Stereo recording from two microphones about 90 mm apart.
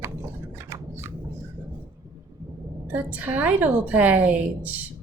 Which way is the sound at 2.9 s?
20° right (ahead or behind).